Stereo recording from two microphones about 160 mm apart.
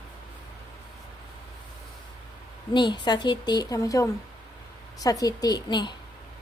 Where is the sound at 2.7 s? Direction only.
30° left (ahead or behind).